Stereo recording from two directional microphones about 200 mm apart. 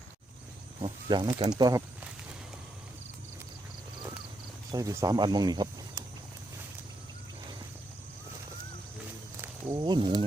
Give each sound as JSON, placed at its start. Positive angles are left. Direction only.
{"t": 0.8, "sound": "speech", "side_deg": -25}
{"t": 4.7, "sound": "speech", "side_deg": -15}
{"t": 9.4, "sound": "speech", "side_deg": -15}